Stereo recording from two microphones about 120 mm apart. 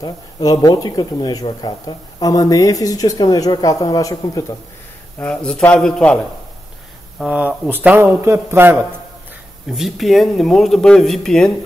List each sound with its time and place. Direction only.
0.0 s speech: 30° left (ahead or behind)
5.2 s a man's voice: 5° left (ahead or behind)
7.2 s a man's voice: 10° right (ahead or behind)
9.7 s speech: centre (ahead or behind)